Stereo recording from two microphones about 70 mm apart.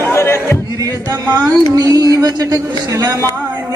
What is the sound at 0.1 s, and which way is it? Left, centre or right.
Music, left.